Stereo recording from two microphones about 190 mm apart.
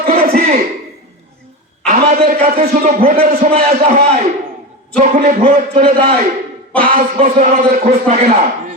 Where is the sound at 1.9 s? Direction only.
40° right (ahead or behind).